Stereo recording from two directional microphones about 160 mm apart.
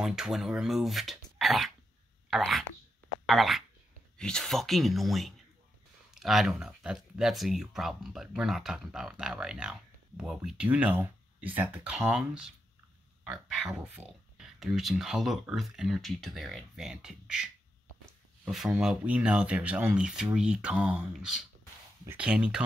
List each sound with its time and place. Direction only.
0.0 s speech: 5° right (ahead or behind)